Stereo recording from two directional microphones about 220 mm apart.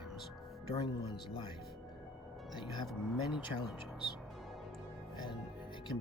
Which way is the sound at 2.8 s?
Centre (ahead or behind).